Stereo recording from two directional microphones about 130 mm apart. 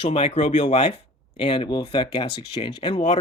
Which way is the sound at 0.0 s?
50° left (ahead or behind).